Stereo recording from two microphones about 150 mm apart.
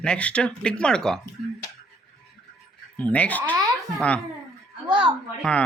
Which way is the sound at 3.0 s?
10° left (ahead or behind).